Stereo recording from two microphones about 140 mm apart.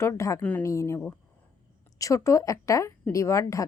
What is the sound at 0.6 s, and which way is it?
Speech, 20° left (ahead or behind).